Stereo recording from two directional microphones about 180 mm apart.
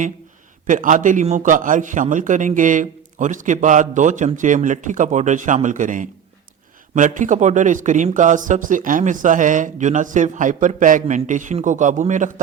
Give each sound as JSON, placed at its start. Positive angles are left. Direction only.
{"t": 0.7, "sound": "speech", "side_deg": -45}